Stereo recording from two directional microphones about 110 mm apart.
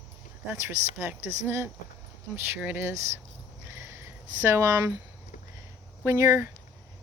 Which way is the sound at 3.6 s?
25° right (ahead or behind).